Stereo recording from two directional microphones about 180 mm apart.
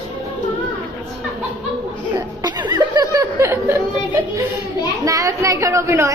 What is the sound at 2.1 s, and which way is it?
Chuckle, 20° right (ahead or behind).